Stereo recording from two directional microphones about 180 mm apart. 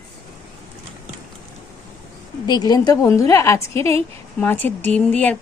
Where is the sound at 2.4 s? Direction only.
20° left (ahead or behind).